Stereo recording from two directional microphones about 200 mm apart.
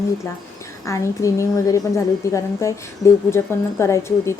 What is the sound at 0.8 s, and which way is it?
A woman's voice, 15° left (ahead or behind).